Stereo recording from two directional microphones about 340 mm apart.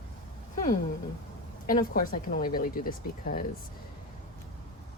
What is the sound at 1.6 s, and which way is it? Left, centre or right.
A woman's voice, left.